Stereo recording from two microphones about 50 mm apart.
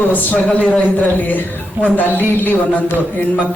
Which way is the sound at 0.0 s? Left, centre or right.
Left.